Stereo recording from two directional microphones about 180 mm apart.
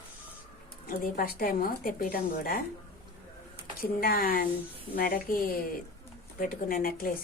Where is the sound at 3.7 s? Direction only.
55° left (ahead or behind).